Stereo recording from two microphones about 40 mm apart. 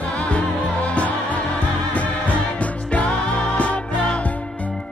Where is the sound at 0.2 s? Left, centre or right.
Left.